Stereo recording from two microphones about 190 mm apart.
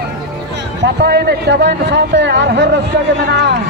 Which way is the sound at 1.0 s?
60° right (ahead or behind).